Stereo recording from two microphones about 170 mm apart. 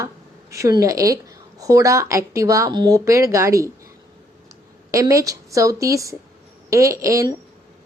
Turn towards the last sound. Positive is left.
turn(degrees=-20)  # may be behind; listen again after turning